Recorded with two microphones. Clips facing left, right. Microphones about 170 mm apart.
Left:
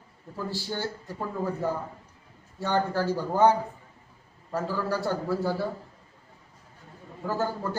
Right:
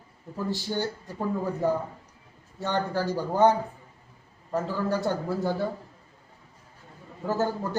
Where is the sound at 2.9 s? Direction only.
15° right (ahead or behind).